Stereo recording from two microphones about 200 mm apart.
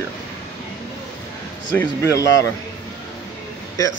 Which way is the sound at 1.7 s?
10° left (ahead or behind).